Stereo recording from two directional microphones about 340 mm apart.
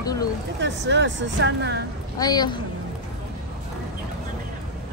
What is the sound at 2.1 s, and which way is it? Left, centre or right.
Speech, centre.